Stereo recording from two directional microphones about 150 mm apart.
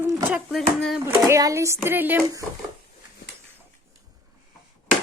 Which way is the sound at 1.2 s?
20° right (ahead or behind).